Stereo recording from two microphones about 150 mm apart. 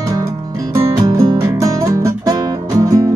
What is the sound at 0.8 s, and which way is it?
Music, 20° right (ahead or behind).